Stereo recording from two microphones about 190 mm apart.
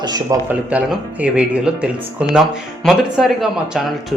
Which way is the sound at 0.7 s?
5° right (ahead or behind).